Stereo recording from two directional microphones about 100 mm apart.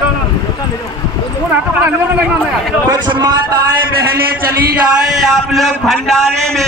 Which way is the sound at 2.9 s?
45° right (ahead or behind).